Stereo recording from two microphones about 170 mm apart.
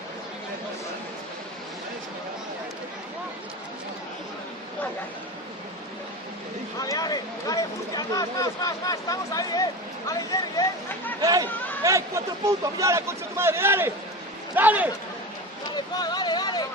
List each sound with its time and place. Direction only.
6.7 s speech: 20° left (ahead or behind)
11.2 s a man's voice: 20° right (ahead or behind)
15.7 s vehicle: 25° left (ahead or behind)